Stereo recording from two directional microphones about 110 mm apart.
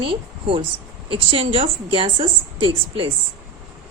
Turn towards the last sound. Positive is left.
turn(degrees=-55)  # may be behind; listen again after turning